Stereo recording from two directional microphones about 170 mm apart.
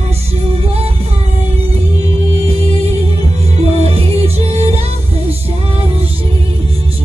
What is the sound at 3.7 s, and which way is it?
Music, 35° right (ahead or behind).